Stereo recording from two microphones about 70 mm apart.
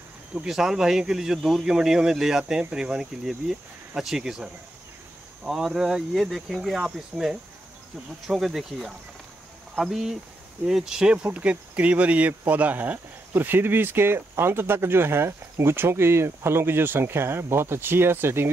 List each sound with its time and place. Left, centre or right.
0.5 s speech: centre; by 18.5 s right